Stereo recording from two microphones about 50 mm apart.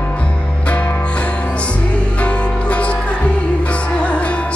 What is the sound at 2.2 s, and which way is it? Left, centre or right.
Music, left.